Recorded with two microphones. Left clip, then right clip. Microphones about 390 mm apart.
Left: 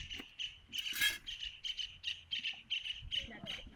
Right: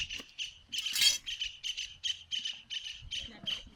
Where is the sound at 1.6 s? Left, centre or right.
Centre.